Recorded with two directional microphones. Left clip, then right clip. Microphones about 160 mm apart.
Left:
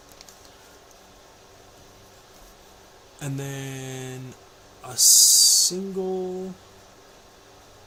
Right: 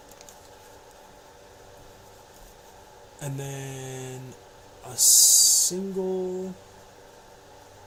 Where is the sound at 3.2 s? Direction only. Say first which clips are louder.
Left 2 dB; 15° left (ahead or behind).